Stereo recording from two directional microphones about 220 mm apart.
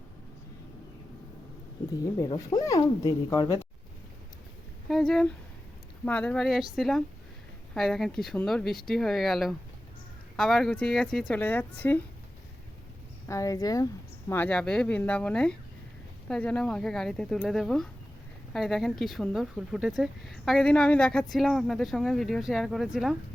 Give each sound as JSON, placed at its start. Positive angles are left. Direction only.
{"t": 2.1, "sound": "speech", "side_deg": 15}
{"t": 4.9, "sound": "speech", "side_deg": 0}
{"t": 13.2, "sound": "speech", "side_deg": 15}